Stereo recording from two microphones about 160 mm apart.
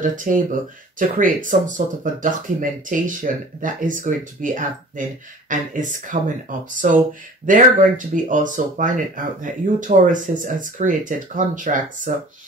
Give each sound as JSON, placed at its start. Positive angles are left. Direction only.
{"t": 0.0, "sound": "speech", "side_deg": -55}